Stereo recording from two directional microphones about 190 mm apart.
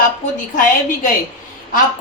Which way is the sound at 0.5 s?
45° left (ahead or behind).